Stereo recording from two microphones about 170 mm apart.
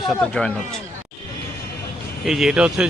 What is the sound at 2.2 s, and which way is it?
Speech, centre (ahead or behind).